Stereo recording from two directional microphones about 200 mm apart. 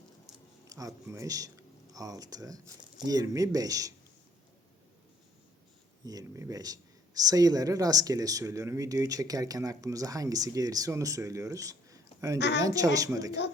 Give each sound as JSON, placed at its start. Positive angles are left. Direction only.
{"t": 0.7, "sound": "speech", "side_deg": -15}
{"t": 6.1, "sound": "speech", "side_deg": -15}
{"t": 12.4, "sound": "speech", "side_deg": 60}
{"t": 12.6, "sound": "speech", "side_deg": -15}